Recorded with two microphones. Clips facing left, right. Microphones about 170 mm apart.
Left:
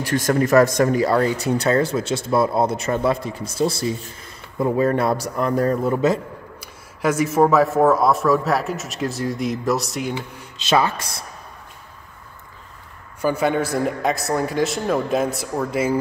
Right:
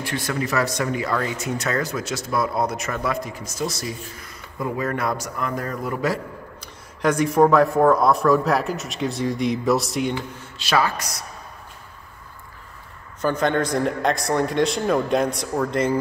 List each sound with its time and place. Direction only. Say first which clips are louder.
0.0 s a man's voice: left 7 dB; 45° left (ahead or behind); by 6.1 s 25° left (ahead or behind)
6.6 s a man's voice: even; 5° left (ahead or behind)
10.1 s speech: even; 20° left (ahead or behind)
13.2 s a man's voice: left 1 dB; 10° left (ahead or behind)